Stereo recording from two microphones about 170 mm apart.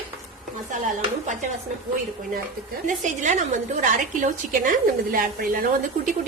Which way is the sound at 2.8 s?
50° right (ahead or behind).